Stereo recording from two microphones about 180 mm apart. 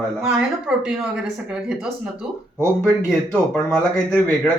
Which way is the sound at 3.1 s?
5° left (ahead or behind).